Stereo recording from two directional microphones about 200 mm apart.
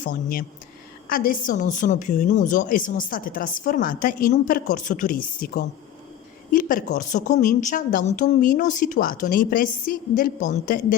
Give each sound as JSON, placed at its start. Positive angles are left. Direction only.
{"t": 0.0, "sound": "a woman's voice", "side_deg": 45}